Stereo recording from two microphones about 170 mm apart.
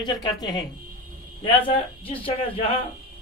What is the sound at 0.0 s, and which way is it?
Speech, 25° left (ahead or behind).